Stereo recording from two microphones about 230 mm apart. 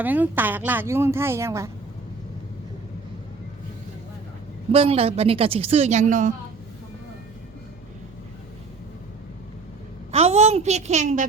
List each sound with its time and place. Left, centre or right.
0.0 s a woman's voice: centre
4.7 s a woman's voice: right
10.1 s a woman's voice: right